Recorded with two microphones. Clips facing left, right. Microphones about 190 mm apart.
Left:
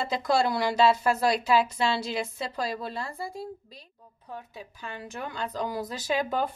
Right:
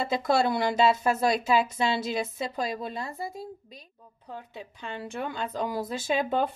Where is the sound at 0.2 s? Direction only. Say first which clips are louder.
Left 1 dB; 20° right (ahead or behind).